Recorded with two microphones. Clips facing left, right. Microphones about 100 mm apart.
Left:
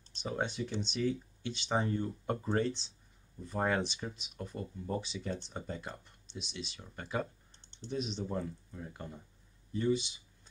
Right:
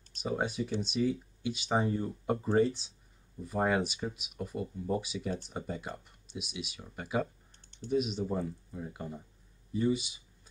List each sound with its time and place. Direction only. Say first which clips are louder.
0.2 s speech: right 3 dB; 5° right (ahead or behind)
7.6 s typing: right 4 dB; 30° left (ahead or behind)
7.9 s speech: right 5 dB; 5° right (ahead or behind)